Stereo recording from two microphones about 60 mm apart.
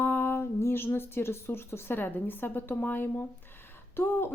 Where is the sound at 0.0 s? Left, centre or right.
Left.